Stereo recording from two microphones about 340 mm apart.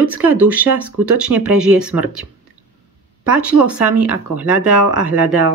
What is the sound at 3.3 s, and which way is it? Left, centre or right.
Speech, centre.